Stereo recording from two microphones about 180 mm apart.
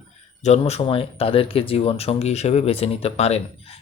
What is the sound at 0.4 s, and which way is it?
Speech, 35° left (ahead or behind).